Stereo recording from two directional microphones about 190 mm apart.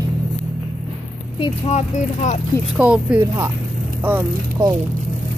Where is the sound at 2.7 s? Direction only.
5° right (ahead or behind).